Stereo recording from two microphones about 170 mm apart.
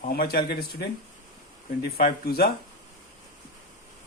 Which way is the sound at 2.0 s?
60° left (ahead or behind).